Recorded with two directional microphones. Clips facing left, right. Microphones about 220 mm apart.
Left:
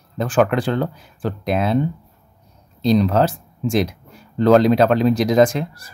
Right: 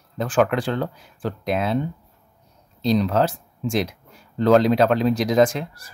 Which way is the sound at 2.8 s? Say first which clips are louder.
Left 3 dB; 50° left (ahead or behind).